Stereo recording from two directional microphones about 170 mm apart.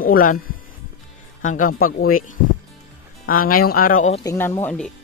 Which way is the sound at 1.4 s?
55° left (ahead or behind).